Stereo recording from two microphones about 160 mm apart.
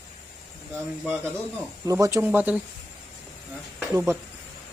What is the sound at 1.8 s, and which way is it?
Speech, 20° right (ahead or behind).